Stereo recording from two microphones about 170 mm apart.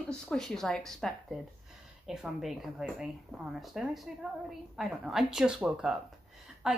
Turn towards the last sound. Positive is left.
turn(degrees=-5)  # may be behind; listen again after turning